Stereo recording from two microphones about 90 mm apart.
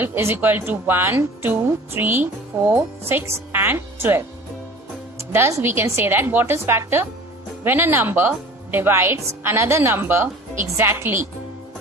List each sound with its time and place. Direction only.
0.0 s a woman's voice: 25° right (ahead or behind)